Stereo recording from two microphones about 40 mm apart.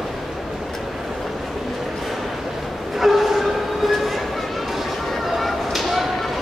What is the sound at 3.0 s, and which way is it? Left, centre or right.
Train, centre.